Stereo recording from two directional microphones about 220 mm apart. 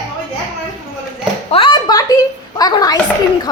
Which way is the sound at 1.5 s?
20° left (ahead or behind).